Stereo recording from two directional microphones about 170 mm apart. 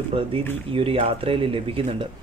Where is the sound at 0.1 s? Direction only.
35° right (ahead or behind).